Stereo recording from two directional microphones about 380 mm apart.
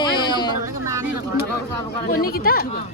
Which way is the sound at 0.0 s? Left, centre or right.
Centre.